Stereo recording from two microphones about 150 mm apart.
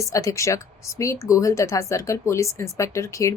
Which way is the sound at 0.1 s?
20° left (ahead or behind).